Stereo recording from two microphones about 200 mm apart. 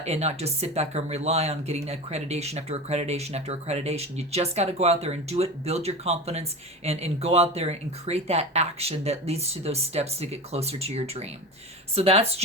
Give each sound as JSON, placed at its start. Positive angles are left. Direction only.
{"t": 0.0, "sound": "speech", "side_deg": -30}